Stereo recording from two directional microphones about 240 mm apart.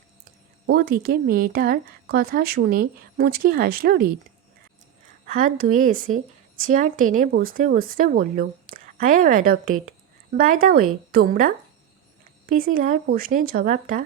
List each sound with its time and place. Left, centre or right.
0.7 s speech: right
5.2 s speech: right